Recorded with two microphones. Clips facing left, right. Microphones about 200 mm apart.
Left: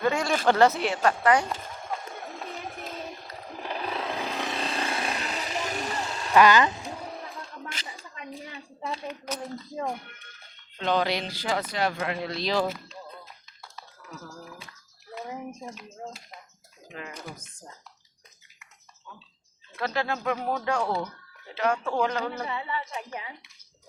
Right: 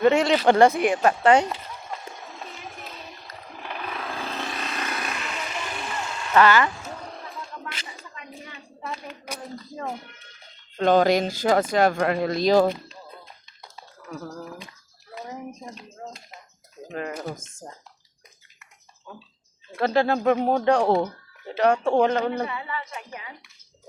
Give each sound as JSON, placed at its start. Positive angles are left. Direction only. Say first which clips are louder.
{"t": 0.0, "sound": "speech", "louder": "right 7 dB", "side_deg": -25}
{"t": 0.4, "sound": "speech", "louder": "right 2 dB", "side_deg": -15}
{"t": 1.2, "sound": "speech", "louder": "right 6 dB", "side_deg": -25}
{"t": 1.5, "sound": "a sound", "louder": "left 1 dB", "side_deg": 50}
{"t": 4.5, "sound": "vehicle", "louder": "left 1 dB", "side_deg": 30}
{"t": 6.3, "sound": "speech", "louder": "even", "side_deg": 15}
{"t": 10.8, "sound": "speech", "louder": "right 8 dB", "side_deg": -45}
{"t": 16.9, "sound": "speech", "louder": "right 9 dB", "side_deg": -50}
{"t": 19.7, "sound": "speech", "louder": "right 8 dB", "side_deg": -30}
{"t": 22.4, "sound": "a woman's voice", "louder": "even", "side_deg": 25}